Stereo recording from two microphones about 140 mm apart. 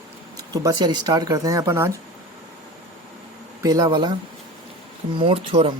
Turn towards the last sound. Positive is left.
turn(degrees=-40)  # may be behind; listen again after turning